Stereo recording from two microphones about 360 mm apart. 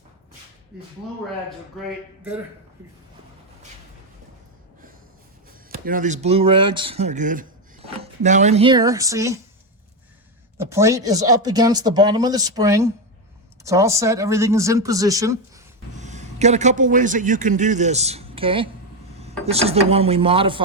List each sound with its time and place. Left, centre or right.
5.7 s speech: right
10.6 s speech: centre
16.0 s a man's voice: centre